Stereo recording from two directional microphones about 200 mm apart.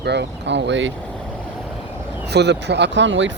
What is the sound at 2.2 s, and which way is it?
Speech, 55° right (ahead or behind).